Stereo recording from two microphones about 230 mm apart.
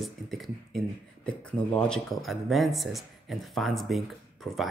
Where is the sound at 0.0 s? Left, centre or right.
Centre.